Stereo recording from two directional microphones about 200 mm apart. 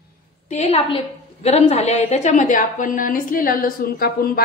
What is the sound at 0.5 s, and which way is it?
A woman's voice, 30° left (ahead or behind).